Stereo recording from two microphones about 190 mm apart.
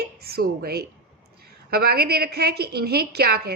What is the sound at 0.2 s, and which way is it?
A woman's voice, 55° right (ahead or behind).